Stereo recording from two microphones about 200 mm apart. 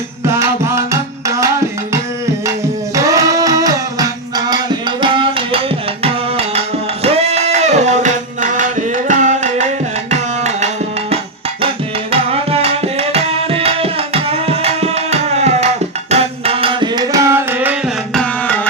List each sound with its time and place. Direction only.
0.3 s music: 15° right (ahead or behind)
2.9 s a sound: 15° right (ahead or behind); by 8.6 s 40° right (ahead or behind)
9.0 s tabla: 35° right (ahead or behind)
12.1 s tabla: 30° right (ahead or behind); by 17.7 s 10° right (ahead or behind)
18.1 s tabla: 5° left (ahead or behind)